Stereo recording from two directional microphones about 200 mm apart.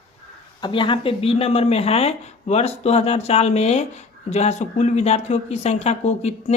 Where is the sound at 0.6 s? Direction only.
25° left (ahead or behind).